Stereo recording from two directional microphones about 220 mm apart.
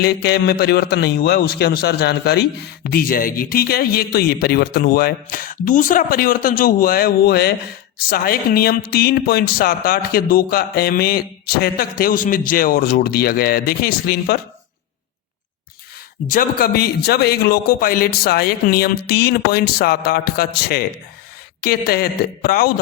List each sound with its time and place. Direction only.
0.0 s speech: 50° left (ahead or behind)
16.3 s speech: 40° left (ahead or behind)